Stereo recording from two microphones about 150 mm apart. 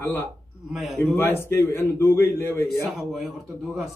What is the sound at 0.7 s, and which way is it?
Speech, centre (ahead or behind).